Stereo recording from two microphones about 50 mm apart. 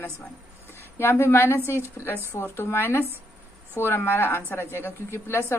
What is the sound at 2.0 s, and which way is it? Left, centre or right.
Speech, left.